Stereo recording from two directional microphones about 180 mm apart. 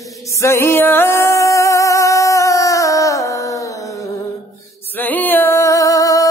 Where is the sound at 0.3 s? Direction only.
15° left (ahead or behind).